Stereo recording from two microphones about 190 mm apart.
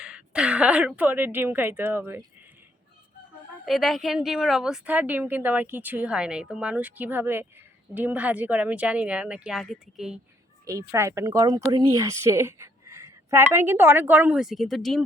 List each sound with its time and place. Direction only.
0.0 s a woman's voice: 5° right (ahead or behind)
3.7 s a woman's voice: centre (ahead or behind)
10.9 s a woman's voice: 15° right (ahead or behind); by 15.0 s centre (ahead or behind)